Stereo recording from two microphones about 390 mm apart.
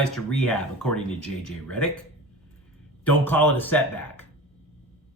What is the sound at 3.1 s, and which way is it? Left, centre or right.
Speech, centre.